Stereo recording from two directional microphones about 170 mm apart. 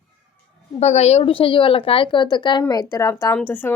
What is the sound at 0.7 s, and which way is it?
A woman's voice, 40° left (ahead or behind).